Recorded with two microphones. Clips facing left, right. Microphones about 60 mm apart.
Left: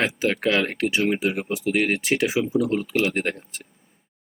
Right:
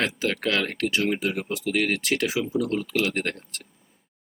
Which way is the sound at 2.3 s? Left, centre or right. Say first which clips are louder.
Left 3 dB; centre.